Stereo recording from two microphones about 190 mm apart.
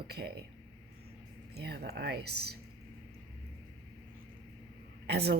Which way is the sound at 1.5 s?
60° right (ahead or behind).